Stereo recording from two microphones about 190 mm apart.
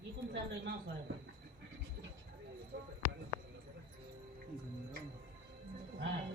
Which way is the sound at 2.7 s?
60° right (ahead or behind).